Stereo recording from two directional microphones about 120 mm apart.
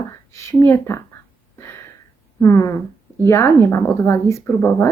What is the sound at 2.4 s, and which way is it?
Speech, 25° left (ahead or behind).